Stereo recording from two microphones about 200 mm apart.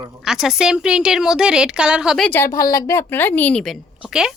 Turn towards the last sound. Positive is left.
turn(degrees=-5)  # may be behind; listen again after turning